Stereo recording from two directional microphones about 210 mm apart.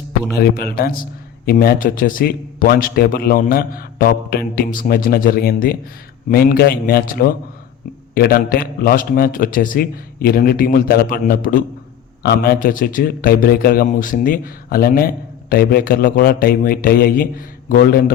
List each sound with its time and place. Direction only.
0.3 s speech: 45° left (ahead or behind)